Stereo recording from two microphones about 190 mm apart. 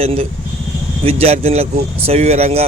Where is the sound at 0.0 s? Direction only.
30° right (ahead or behind).